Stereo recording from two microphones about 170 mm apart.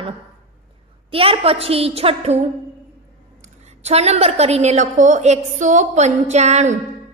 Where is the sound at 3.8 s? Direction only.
40° right (ahead or behind).